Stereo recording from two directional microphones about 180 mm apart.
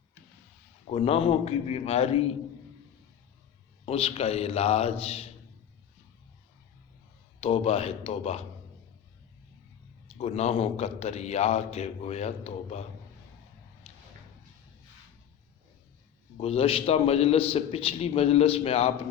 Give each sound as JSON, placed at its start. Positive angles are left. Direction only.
{"t": 0.9, "sound": "a man's voice", "side_deg": 35}
{"t": 3.8, "sound": "a man's voice", "side_deg": 30}
{"t": 7.4, "sound": "a man's voice", "side_deg": 30}
{"t": 10.2, "sound": "a man's voice", "side_deg": 35}
{"t": 13.9, "sound": "a sound", "side_deg": 35}
{"t": 16.4, "sound": "a man's voice", "side_deg": 30}